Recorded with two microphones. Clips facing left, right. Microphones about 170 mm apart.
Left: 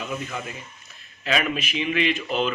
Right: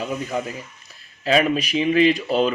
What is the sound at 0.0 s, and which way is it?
A man's voice, 30° right (ahead or behind).